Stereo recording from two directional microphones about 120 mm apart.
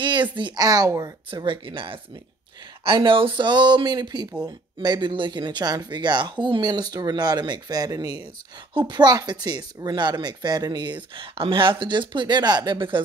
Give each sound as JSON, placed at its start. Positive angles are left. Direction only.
{"t": 0.0, "sound": "speech", "side_deg": -40}
{"t": 1.3, "sound": "speech", "side_deg": -45}
{"t": 11.1, "sound": "speech", "side_deg": -45}